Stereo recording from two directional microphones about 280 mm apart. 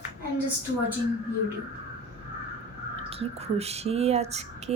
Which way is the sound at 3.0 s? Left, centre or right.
Right.